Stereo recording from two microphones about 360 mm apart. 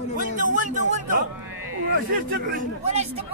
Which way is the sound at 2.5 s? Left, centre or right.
Centre.